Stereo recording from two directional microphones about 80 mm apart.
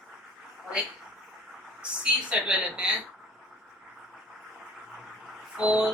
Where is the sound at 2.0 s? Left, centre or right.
Centre.